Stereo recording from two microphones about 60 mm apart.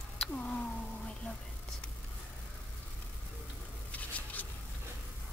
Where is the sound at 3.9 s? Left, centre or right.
Left.